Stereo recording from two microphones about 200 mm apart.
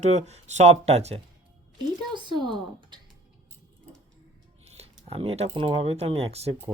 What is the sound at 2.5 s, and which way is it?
Speech, 25° right (ahead or behind).